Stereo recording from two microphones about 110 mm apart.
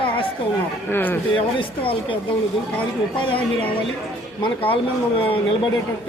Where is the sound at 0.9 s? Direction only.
15° left (ahead or behind).